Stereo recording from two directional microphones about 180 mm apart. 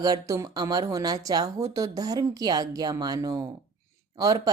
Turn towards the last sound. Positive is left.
turn(degrees=-20)  # may be behind; listen again after turning